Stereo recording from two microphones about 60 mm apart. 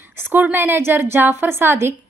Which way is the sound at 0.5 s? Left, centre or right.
Right.